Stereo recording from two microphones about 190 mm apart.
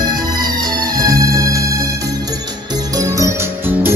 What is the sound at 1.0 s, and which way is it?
Music, 15° right (ahead or behind).